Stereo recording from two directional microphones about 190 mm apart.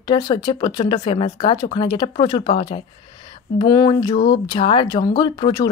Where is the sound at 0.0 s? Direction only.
25° left (ahead or behind).